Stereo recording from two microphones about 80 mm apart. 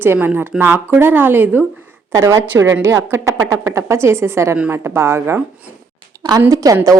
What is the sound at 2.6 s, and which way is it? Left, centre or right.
A woman's voice, right.